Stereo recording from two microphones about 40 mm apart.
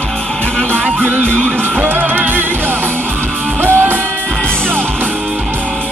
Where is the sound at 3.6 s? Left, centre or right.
Right.